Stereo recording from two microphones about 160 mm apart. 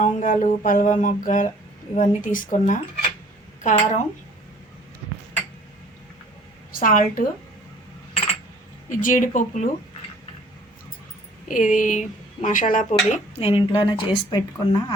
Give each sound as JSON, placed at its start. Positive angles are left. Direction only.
{"t": 0.0, "sound": "speech", "side_deg": 50}
{"t": 6.7, "sound": "a woman's voice", "side_deg": 60}
{"t": 8.9, "sound": "speech", "side_deg": 55}
{"t": 11.4, "sound": "speech", "side_deg": 55}